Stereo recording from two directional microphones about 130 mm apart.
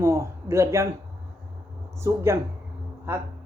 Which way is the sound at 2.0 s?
20° right (ahead or behind).